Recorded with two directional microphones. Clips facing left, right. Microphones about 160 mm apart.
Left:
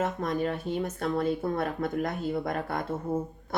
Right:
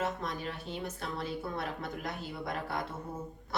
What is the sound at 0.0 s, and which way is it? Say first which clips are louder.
Speech: left 7 dB; 50° left (ahead or behind).